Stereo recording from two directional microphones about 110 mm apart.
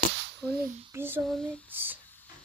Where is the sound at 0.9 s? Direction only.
20° right (ahead or behind).